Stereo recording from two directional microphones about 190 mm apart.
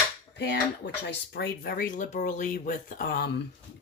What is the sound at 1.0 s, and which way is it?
Speech, 60° left (ahead or behind).